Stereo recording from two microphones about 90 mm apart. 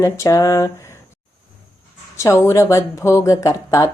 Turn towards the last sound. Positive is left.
turn(degrees=40)  # may be behind; listen again after turning